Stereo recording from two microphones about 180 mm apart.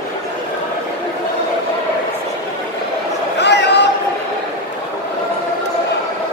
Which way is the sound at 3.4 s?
70° left (ahead or behind).